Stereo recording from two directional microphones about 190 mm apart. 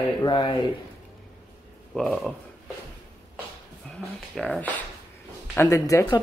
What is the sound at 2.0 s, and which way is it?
Speech, centre (ahead or behind).